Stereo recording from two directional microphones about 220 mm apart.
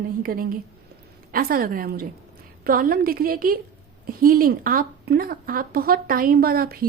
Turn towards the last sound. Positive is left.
turn(degrees=-45)  # may be behind; listen again after turning